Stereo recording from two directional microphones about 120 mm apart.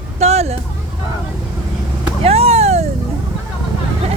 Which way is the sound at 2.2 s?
60° right (ahead or behind).